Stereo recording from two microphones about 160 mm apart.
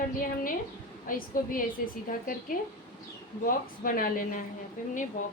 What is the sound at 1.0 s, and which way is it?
A woman's voice, 60° left (ahead or behind).